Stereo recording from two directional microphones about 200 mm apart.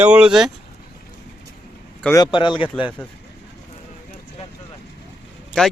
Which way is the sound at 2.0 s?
20° left (ahead or behind).